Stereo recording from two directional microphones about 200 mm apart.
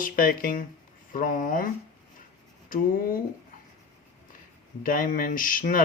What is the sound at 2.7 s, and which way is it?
Speech, 45° left (ahead or behind).